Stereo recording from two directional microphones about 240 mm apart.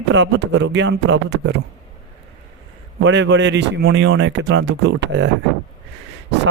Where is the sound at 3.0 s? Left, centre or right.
Right.